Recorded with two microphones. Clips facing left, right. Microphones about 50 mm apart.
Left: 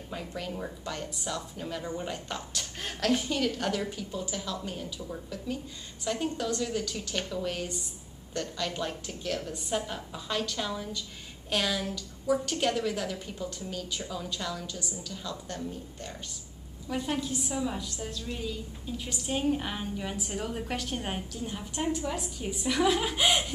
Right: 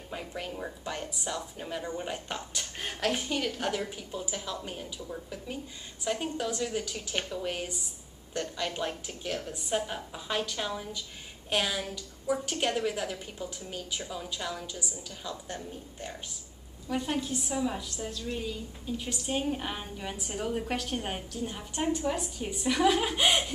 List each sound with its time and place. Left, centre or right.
0.1 s a woman's voice: centre
6.0 s a woman's voice: centre
16.9 s a woman's voice: centre